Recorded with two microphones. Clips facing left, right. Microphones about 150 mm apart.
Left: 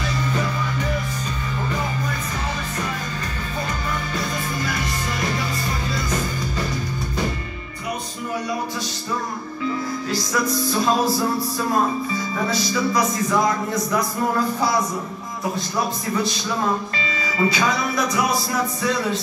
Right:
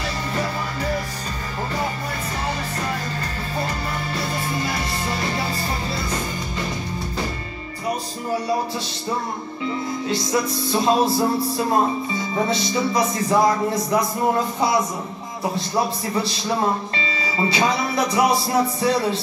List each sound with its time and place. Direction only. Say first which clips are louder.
4.1 s music: right 1 dB; 30° right (ahead or behind)
9.7 s music: right 1 dB; 25° right (ahead or behind)